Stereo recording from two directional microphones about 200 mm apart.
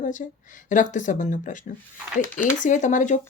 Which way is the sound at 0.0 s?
40° left (ahead or behind).